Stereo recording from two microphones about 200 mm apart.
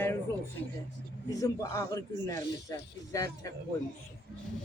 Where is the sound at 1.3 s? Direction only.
15° left (ahead or behind).